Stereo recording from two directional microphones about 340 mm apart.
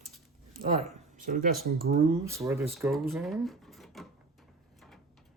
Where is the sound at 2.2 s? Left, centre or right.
Centre.